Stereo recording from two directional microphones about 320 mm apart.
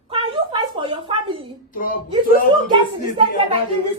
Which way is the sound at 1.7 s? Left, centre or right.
Left.